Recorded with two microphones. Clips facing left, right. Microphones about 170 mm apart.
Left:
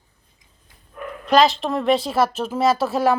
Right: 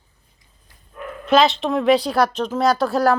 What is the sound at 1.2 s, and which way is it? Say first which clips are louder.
A woman's voice: even; centre (ahead or behind).